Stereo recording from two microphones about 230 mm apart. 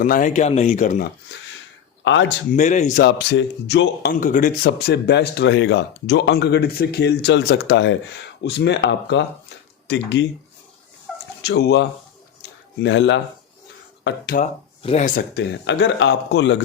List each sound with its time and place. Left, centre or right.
0.0 s speech: left
2.0 s a man's voice: left
2.6 s a man's voice: left
11.1 s dog: centre
11.4 s a man's voice: left
12.4 s a sound: left
14.0 s speech: left
14.4 s speech: left
15.6 s a man's voice: left